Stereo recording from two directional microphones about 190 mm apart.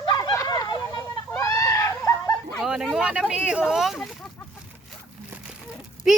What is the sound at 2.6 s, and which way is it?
Speech, centre (ahead or behind).